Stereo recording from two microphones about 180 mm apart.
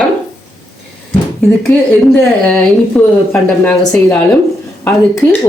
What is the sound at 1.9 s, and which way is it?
Speech, 10° left (ahead or behind).